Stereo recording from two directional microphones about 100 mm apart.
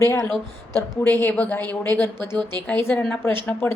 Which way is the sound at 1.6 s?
40° right (ahead or behind).